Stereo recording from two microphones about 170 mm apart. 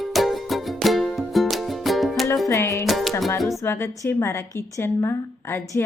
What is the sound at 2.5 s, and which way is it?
Music, 15° left (ahead or behind).